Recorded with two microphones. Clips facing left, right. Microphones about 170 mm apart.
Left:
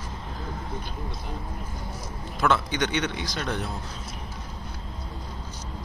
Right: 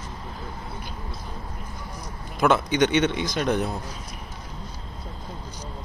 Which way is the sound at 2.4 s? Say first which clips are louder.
Right 5 dB; 20° right (ahead or behind).